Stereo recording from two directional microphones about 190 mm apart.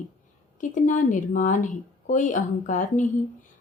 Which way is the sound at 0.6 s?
40° left (ahead or behind).